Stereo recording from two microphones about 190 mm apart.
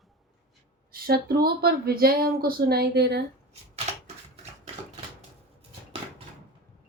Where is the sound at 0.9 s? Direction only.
50° right (ahead or behind).